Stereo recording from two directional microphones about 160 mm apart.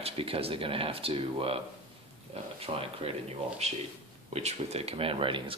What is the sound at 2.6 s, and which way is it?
A man's voice, 35° right (ahead or behind).